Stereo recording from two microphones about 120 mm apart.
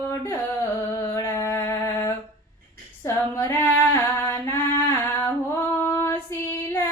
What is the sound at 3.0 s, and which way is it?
Female singing, 20° left (ahead or behind).